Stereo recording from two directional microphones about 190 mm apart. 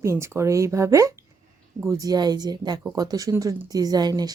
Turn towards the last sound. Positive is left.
turn(degrees=-20)  # may be behind; listen again after turning